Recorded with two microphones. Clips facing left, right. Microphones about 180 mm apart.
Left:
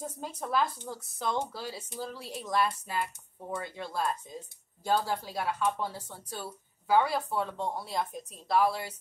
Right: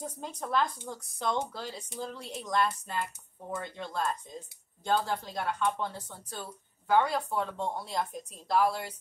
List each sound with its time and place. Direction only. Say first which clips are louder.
0.0 s speech: even; 5° left (ahead or behind)